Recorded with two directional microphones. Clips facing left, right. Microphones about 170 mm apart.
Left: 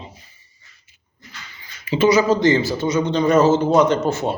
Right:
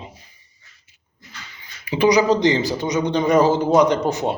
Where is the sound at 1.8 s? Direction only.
15° right (ahead or behind).